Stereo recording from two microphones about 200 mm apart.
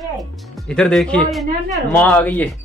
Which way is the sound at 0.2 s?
Centre (ahead or behind).